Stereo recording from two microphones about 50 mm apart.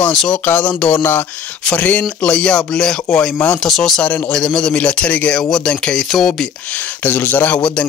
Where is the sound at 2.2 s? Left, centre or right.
Centre.